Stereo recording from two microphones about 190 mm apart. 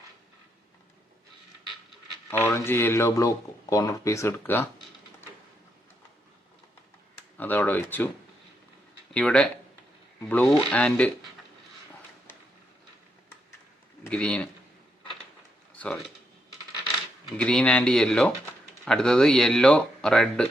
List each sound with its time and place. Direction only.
1.9 s speech: 10° left (ahead or behind)
7.3 s speech: 10° left (ahead or behind)
9.1 s speech: 5° left (ahead or behind)
14.0 s a man's voice: 5° left (ahead or behind)
15.8 s speech: 5° left (ahead or behind)
17.2 s speech: 5° left (ahead or behind)